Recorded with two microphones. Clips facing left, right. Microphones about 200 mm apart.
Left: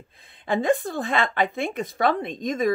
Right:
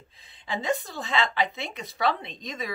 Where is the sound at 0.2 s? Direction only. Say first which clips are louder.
Left 8 dB; 55° left (ahead or behind).